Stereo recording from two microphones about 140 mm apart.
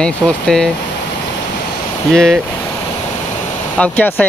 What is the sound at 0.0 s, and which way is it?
Speech, 5° left (ahead or behind).